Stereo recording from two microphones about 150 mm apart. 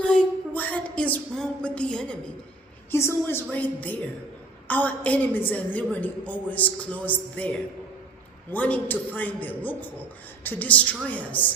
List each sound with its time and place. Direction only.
0.0 s a sound: 5° left (ahead or behind)
2.9 s a woman's voice: 15° left (ahead or behind)
8.5 s a woman's voice: 10° left (ahead or behind)